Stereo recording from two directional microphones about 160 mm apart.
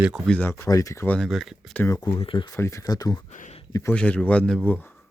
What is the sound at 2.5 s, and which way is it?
Speech, 20° left (ahead or behind).